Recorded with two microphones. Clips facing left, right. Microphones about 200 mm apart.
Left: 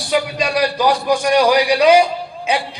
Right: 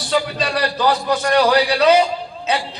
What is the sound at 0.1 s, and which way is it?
A man's voice, 10° left (ahead or behind).